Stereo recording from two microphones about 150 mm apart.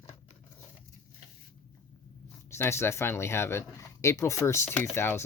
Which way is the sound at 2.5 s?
20° left (ahead or behind).